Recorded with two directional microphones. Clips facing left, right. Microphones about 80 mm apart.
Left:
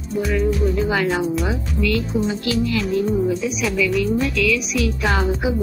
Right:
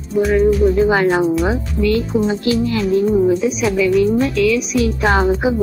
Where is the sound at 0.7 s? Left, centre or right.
Right.